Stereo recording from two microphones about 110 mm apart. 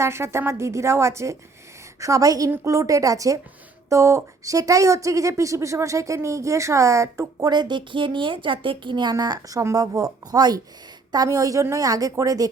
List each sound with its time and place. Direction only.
0.0 s a woman's voice: 25° right (ahead or behind)